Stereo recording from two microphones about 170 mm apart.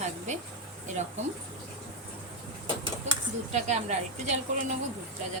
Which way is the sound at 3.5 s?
45° right (ahead or behind).